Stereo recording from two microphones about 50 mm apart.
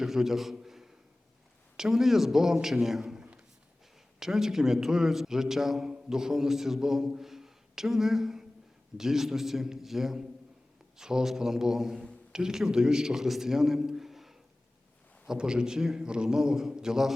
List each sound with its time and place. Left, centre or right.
0.0 s a man's voice: centre
3.2 s a sound: centre
4.2 s a man's voice: centre
15.3 s a man's voice: centre